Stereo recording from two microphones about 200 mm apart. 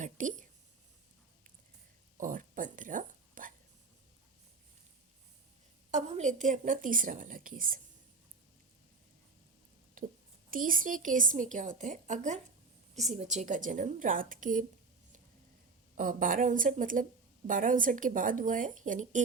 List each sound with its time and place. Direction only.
0.0 s speech: 40° right (ahead or behind)
2.1 s a sound: 40° right (ahead or behind)
5.9 s a woman's voice: 35° right (ahead or behind)
10.0 s a sound: 45° right (ahead or behind)
10.5 s a woman's voice: 45° right (ahead or behind)
16.0 s a woman's voice: 40° right (ahead or behind)